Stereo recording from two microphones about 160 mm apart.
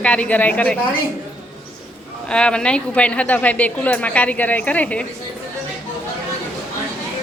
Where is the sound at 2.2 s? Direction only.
5° left (ahead or behind).